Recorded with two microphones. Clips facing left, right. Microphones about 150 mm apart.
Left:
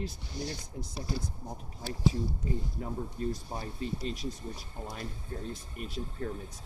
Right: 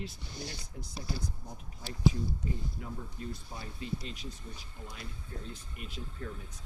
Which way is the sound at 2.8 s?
40° left (ahead or behind).